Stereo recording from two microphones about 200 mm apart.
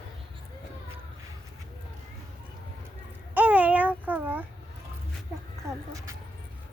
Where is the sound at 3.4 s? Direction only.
10° right (ahead or behind).